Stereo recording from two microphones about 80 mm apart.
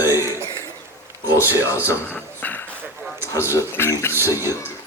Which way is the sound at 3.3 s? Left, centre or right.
Left.